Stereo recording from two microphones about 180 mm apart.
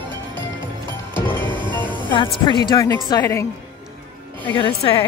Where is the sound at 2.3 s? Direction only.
25° left (ahead or behind).